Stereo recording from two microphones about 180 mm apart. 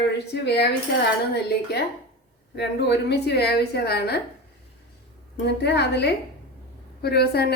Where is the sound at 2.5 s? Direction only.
70° left (ahead or behind).